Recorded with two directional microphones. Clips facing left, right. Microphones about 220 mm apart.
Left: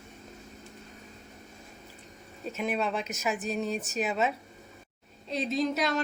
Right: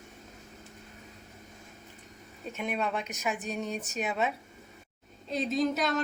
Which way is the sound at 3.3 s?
35° left (ahead or behind).